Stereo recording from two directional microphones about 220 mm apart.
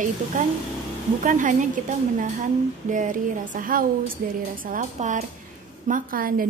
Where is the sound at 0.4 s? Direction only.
35° right (ahead or behind).